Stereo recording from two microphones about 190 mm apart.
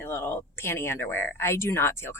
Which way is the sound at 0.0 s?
10° left (ahead or behind).